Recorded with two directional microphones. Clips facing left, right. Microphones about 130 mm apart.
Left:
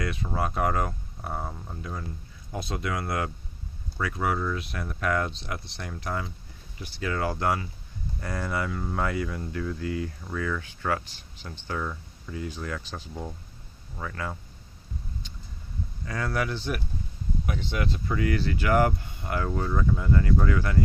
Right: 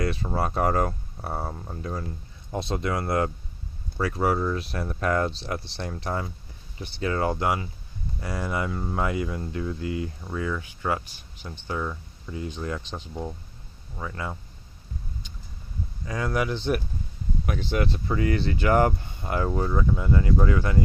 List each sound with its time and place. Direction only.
0.0 s speech: 35° right (ahead or behind)
2.5 s speech: 30° right (ahead or behind)
8.2 s speech: 15° right (ahead or behind)
12.3 s speech: 25° right (ahead or behind)
15.2 s a sound: 15° right (ahead or behind)
16.0 s speech: 15° right (ahead or behind)
17.4 s speech: 50° right (ahead or behind)
18.1 s speech: 30° right (ahead or behind)